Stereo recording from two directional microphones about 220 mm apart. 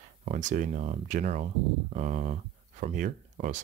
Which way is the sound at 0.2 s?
35° right (ahead or behind).